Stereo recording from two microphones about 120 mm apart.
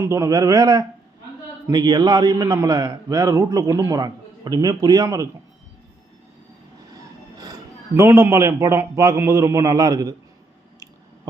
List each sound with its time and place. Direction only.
0.0 s a man's voice: 25° right (ahead or behind)
7.3 s music: 30° right (ahead or behind)
8.0 s a man's voice: 20° right (ahead or behind)